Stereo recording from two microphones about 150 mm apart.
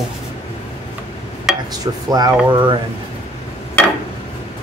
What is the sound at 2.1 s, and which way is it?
Speech, 30° right (ahead or behind).